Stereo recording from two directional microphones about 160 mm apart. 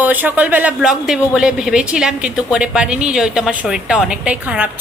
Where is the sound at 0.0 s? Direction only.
10° right (ahead or behind).